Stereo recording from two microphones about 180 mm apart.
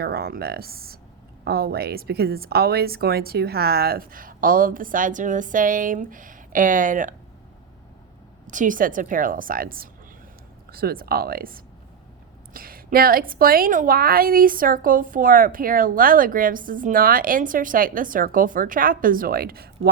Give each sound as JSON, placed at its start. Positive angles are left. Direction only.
{"t": 0.0, "sound": "a woman's voice", "side_deg": -60}
{"t": 8.4, "sound": "a woman's voice", "side_deg": -45}